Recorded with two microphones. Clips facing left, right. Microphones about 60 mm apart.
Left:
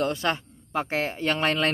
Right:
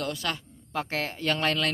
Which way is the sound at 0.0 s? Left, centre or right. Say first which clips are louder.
Left 6 dB; left.